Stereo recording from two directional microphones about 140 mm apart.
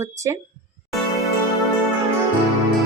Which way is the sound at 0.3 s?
20° right (ahead or behind).